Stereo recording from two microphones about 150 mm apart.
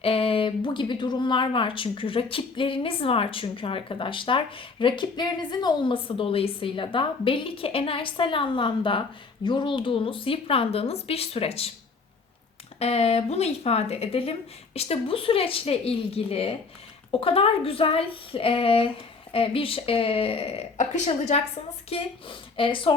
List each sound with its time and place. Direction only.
0.0 s speech: 40° left (ahead or behind)
12.8 s speech: 45° left (ahead or behind)